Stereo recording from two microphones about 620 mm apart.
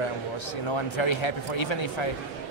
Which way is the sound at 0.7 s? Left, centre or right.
Left.